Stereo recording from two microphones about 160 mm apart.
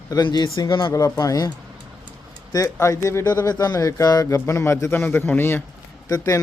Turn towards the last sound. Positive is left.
turn(degrees=20)  # may be behind; listen again after turning